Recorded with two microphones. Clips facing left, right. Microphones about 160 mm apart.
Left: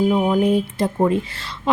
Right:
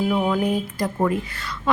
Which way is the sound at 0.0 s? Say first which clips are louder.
Left 4 dB; 20° left (ahead or behind).